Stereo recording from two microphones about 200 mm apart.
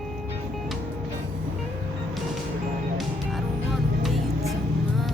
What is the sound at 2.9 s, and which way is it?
Music, centre (ahead or behind).